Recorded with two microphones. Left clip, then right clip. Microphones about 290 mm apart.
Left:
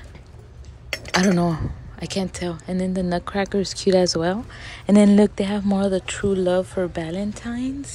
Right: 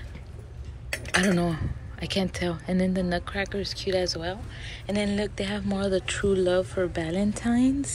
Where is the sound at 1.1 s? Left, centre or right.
Centre.